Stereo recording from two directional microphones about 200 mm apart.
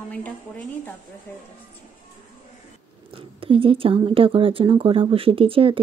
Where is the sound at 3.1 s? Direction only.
25° right (ahead or behind).